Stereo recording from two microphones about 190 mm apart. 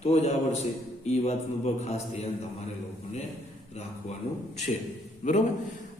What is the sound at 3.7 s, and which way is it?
Speech, 35° left (ahead or behind).